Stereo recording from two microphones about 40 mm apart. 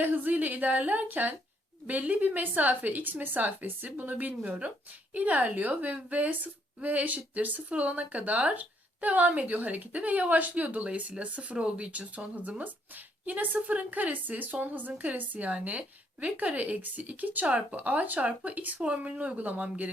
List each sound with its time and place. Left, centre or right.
0.0 s a woman's voice: right